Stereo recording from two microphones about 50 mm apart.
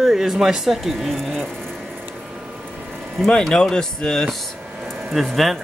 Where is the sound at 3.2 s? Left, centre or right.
Centre.